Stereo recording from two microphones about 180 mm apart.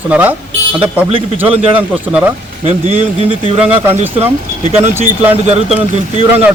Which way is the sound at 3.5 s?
5° right (ahead or behind).